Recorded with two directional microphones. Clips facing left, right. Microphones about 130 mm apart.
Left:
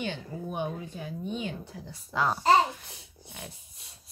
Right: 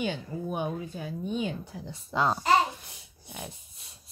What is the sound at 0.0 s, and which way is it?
Speech, 10° right (ahead or behind).